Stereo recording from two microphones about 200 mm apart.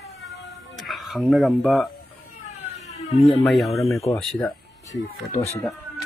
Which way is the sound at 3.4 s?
Centre (ahead or behind).